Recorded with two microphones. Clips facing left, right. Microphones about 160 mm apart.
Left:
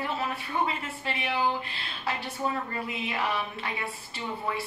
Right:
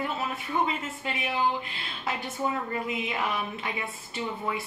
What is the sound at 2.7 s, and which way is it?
Speech, 20° right (ahead or behind).